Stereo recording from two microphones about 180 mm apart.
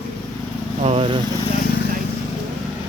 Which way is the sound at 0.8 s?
35° right (ahead or behind).